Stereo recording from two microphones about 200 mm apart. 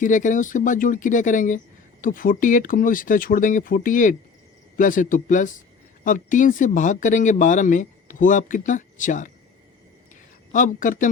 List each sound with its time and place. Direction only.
0.0 s speech: 40° left (ahead or behind)
10.5 s speech: 40° left (ahead or behind)